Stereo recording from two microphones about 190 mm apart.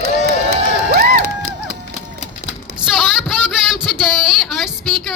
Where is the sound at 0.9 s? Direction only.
55° right (ahead or behind).